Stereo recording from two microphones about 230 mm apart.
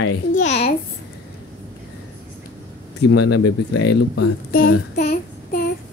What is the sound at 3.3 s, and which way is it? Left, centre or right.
Speech, left.